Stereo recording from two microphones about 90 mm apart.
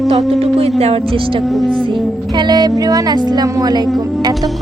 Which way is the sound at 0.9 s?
85° right.